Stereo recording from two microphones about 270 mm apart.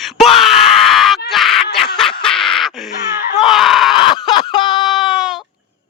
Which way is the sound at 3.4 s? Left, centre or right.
Centre.